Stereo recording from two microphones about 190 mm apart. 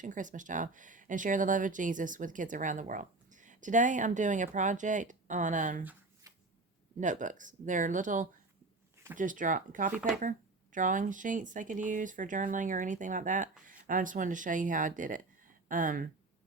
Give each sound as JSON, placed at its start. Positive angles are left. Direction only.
{"t": 0.0, "sound": "speech", "side_deg": -40}
{"t": 5.8, "sound": "shuffling cards", "side_deg": -10}
{"t": 7.0, "sound": "speech", "side_deg": -40}